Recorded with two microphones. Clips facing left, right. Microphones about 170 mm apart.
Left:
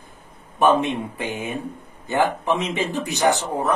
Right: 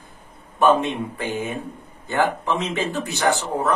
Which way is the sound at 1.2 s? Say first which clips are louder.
Right 1 dB; 15° left (ahead or behind).